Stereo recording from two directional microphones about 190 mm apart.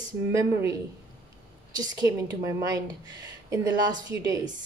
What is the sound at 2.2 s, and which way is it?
Speech, 20° right (ahead or behind).